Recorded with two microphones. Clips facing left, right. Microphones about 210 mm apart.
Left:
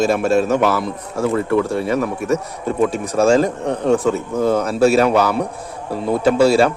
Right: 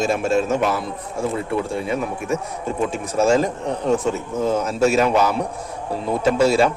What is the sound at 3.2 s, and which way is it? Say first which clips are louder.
A man's voice: left 3 dB; 55° left (ahead or behind).